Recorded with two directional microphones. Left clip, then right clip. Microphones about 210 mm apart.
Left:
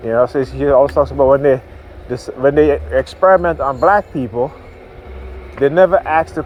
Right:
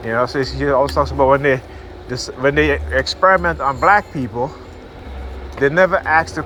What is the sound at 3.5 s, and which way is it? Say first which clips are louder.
Speech: left 1 dB; 35° left (ahead or behind).